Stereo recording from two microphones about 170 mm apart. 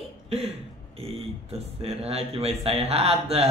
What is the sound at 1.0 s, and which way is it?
Speech, 35° right (ahead or behind).